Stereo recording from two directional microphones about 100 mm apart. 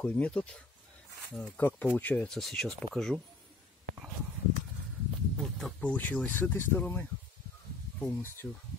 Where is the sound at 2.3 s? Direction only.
5° left (ahead or behind).